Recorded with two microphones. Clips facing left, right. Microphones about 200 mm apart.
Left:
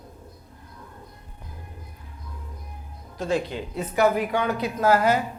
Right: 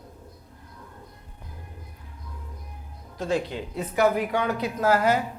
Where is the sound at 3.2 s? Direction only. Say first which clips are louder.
Left 1 dB; 20° left (ahead or behind).